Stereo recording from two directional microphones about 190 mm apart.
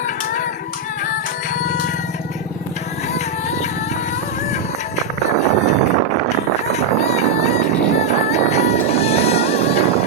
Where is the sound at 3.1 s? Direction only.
35° left (ahead or behind).